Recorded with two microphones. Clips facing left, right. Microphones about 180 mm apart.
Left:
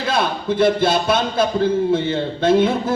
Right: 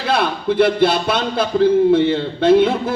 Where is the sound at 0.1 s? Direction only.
65° right (ahead or behind).